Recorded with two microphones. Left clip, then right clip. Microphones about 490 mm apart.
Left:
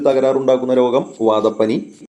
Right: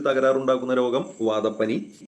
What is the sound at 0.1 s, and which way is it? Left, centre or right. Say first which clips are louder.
A man's voice: left 5 dB; right.